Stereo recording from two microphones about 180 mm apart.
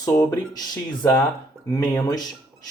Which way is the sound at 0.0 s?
20° left (ahead or behind).